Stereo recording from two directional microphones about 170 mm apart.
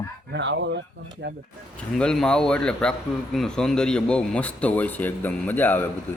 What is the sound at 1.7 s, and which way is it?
A man's voice, 5° left (ahead or behind).